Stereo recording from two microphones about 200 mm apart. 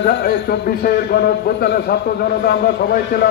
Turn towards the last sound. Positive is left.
turn(degrees=50)  # may be behind; listen again after turning